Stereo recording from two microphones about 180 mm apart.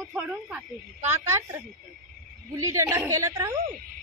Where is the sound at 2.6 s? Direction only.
15° right (ahead or behind).